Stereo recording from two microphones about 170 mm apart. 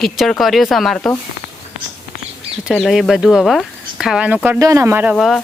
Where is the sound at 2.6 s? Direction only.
Centre (ahead or behind).